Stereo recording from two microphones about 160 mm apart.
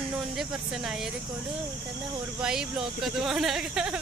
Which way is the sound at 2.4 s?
5° right (ahead or behind).